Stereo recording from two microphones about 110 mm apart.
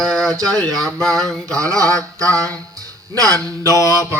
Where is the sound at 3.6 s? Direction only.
30° left (ahead or behind).